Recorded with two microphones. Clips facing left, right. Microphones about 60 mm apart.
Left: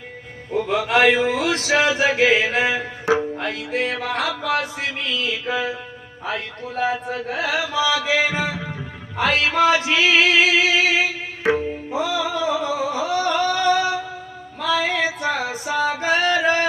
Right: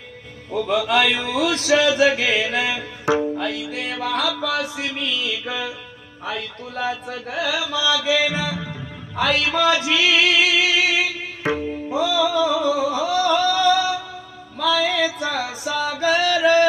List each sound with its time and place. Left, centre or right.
0.7 s mantra: left
3.3 s music: left
6.2 s mantra: left
11.9 s music: left